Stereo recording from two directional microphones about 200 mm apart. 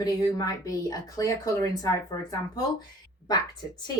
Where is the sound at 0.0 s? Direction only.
20° left (ahead or behind).